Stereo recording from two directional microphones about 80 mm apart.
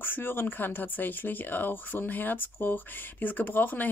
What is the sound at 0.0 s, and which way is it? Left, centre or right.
Speech, left.